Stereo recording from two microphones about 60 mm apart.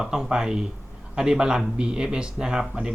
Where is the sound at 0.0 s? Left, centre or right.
Centre.